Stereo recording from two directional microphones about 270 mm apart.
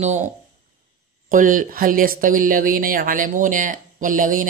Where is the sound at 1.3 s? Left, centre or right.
Right.